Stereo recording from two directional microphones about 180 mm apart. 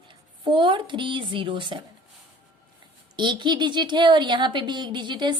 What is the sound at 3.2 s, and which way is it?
Speech, 25° right (ahead or behind).